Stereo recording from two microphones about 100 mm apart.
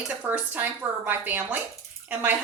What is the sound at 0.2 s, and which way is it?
A woman's voice, 15° right (ahead or behind).